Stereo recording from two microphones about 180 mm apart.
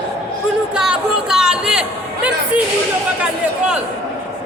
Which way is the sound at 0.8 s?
5° right (ahead or behind).